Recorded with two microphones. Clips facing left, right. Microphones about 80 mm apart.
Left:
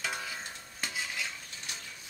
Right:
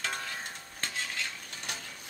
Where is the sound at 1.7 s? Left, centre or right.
Right.